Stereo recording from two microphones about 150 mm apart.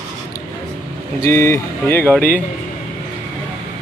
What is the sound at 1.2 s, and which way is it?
Speech, 15° left (ahead or behind).